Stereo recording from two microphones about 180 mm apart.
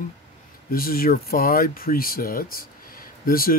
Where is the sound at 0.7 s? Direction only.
55° left (ahead or behind).